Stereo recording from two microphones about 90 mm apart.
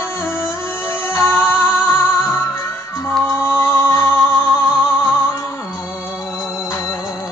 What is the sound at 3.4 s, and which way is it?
Music, 30° left (ahead or behind).